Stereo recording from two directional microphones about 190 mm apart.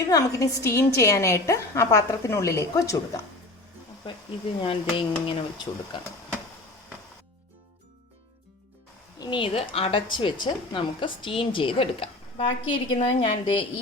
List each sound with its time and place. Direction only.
0.0 s a woman's voice: 20° left (ahead or behind)
4.6 s a woman's voice: 25° left (ahead or behind)
9.1 s a woman's voice: 25° left (ahead or behind)